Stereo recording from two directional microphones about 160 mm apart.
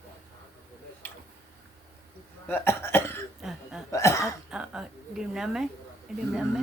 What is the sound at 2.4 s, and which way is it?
Cough, 15° left (ahead or behind).